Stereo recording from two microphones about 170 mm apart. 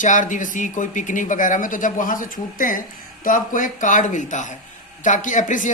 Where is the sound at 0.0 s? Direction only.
50° left (ahead or behind).